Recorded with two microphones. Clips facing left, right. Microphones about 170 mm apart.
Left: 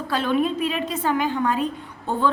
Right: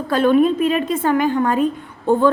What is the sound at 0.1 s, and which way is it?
A woman's voice, 50° right (ahead or behind).